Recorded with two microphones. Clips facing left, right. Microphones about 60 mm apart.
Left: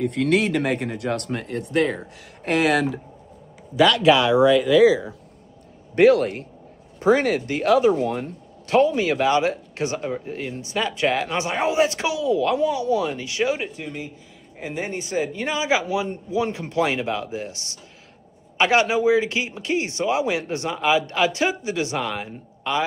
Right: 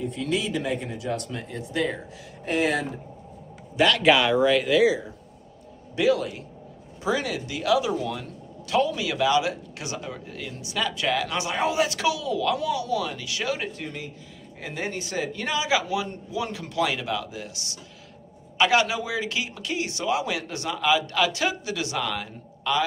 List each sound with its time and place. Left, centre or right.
0.0 s speech: left
2.4 s speech: left
5.9 s speech: left
7.0 s speech: left
13.6 s speech: centre